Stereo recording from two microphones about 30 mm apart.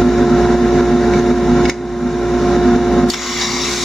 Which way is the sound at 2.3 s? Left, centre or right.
Centre.